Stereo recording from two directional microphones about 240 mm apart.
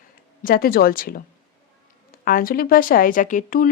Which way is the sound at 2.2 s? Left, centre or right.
Left.